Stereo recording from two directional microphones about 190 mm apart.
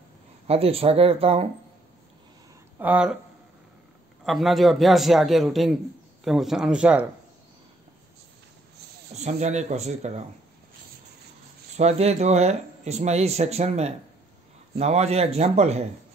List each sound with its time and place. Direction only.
0.5 s speech: 30° right (ahead or behind)
2.8 s speech: 5° right (ahead or behind)
4.2 s a man's voice: centre (ahead or behind)
9.1 s speech: 35° right (ahead or behind)
11.7 s speech: 35° right (ahead or behind)